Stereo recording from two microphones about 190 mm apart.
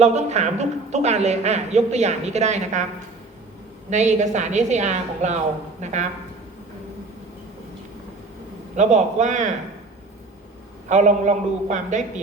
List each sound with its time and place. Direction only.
0.0 s a man's voice: 35° right (ahead or behind)
3.8 s a man's voice: 40° right (ahead or behind)
8.7 s a man's voice: 40° right (ahead or behind)
10.8 s a man's voice: 40° right (ahead or behind)